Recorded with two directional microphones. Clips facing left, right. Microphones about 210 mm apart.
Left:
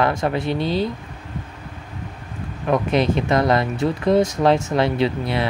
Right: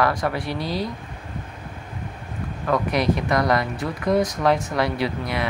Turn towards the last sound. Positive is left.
turn(degrees=30)  # may be behind; listen again after turning